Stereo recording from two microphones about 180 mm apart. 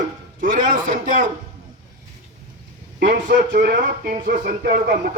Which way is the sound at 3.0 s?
50° right (ahead or behind).